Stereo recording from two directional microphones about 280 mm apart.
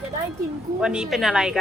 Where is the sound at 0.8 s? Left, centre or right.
Centre.